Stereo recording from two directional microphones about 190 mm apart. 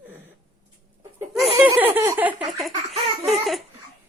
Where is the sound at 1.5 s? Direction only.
15° right (ahead or behind).